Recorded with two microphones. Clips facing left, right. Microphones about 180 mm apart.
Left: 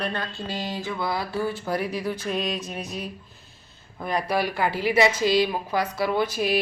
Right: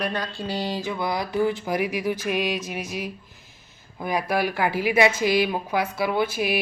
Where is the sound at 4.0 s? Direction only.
5° right (ahead or behind).